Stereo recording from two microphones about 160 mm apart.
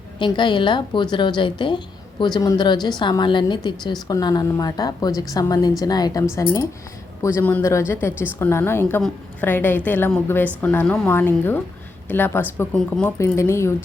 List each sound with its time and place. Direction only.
0.2 s a woman's voice: 30° left (ahead or behind); by 13.1 s 5° left (ahead or behind)
13.1 s a woman's voice: 15° left (ahead or behind)